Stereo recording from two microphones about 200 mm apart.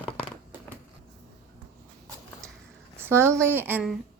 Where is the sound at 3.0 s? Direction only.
10° right (ahead or behind).